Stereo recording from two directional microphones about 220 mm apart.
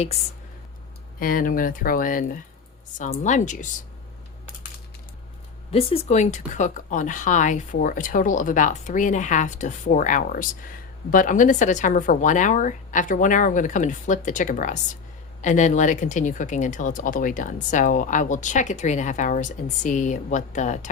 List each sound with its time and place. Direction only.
1.2 s speech: 40° left (ahead or behind)
5.7 s speech: 30° left (ahead or behind)